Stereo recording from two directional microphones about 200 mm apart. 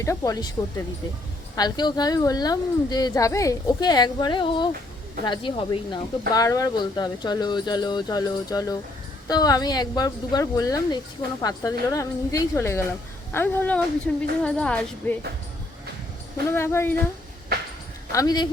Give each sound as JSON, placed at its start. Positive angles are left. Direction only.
{"t": 0.0, "sound": "a woman's voice", "side_deg": 15}
{"t": 1.5, "sound": "a woman's voice", "side_deg": 20}
{"t": 16.5, "sound": "a woman's voice", "side_deg": 10}
{"t": 18.1, "sound": "a woman's voice", "side_deg": 20}